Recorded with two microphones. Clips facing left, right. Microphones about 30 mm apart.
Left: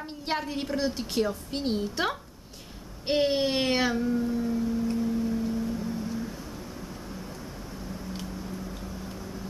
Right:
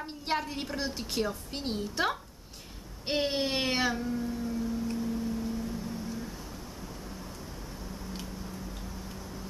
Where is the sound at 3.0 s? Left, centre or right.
Centre.